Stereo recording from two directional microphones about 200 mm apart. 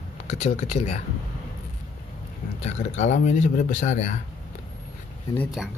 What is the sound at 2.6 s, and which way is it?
Speech, 35° left (ahead or behind).